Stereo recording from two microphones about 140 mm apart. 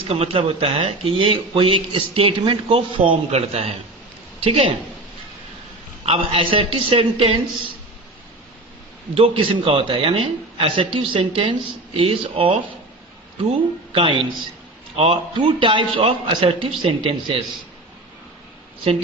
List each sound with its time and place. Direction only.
0.1 s a man's voice: 45° right (ahead or behind)
6.1 s speech: 40° right (ahead or behind)
9.1 s speech: 40° right (ahead or behind)
13.9 s speech: 35° right (ahead or behind)